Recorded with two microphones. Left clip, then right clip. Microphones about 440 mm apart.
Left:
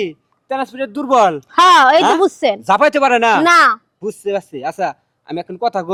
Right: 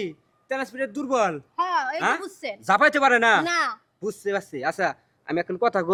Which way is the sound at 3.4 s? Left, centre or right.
Left.